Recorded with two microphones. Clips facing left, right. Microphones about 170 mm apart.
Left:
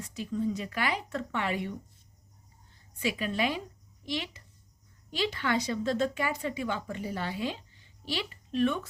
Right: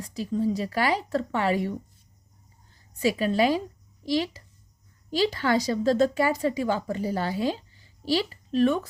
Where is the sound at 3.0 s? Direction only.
40° right (ahead or behind).